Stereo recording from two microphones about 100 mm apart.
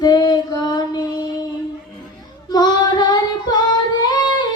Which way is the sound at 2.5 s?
45° left (ahead or behind).